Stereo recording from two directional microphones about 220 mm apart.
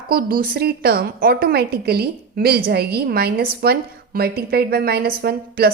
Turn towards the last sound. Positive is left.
turn(degrees=-45)  # may be behind; listen again after turning